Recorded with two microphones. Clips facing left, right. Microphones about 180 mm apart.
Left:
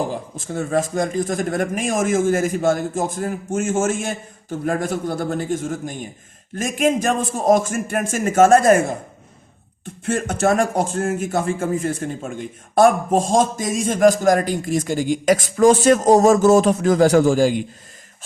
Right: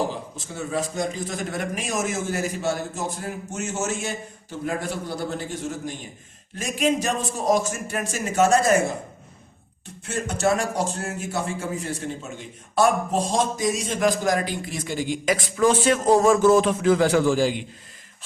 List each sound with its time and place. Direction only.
0.3 s speech: 50° left (ahead or behind)
9.8 s speech: 50° left (ahead or behind)